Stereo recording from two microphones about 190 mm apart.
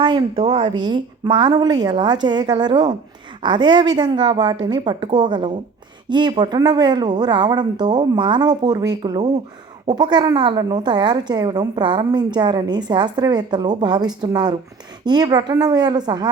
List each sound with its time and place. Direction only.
0.0 s a woman's voice: 25° right (ahead or behind)